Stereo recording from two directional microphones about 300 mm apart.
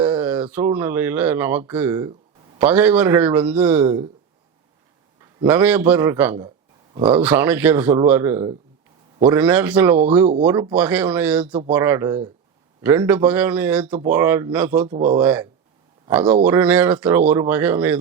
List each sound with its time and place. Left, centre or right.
0.0 s a sound: centre
0.8 s speech: centre
5.2 s speech: centre
14.8 s speech: right
15.2 s speech: centre